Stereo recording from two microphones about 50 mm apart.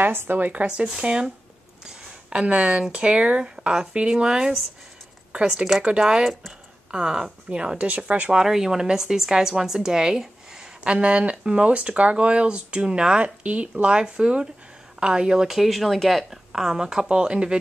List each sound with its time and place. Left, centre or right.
0.0 s speech: right
0.7 s speech: centre
1.9 s a sound: centre
2.4 s speech: right
8.3 s speech: centre
10.8 s speech: right